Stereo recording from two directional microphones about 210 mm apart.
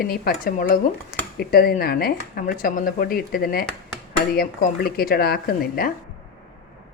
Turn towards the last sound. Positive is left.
turn(degrees=45)  # may be behind; listen again after turning